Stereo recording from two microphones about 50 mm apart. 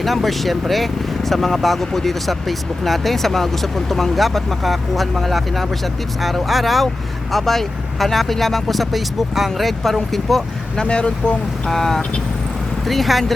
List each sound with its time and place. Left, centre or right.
0.0 s speech: centre
10.8 s speech: left
11.7 s speech: centre